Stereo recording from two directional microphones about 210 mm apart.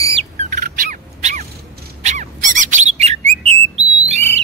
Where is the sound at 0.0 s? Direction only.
30° right (ahead or behind).